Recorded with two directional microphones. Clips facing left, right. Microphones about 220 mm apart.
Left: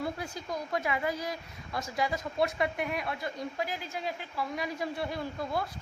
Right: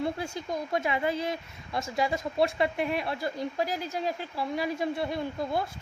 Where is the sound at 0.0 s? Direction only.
25° right (ahead or behind).